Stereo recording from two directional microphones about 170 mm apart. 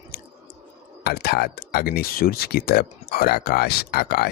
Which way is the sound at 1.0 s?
70° left (ahead or behind).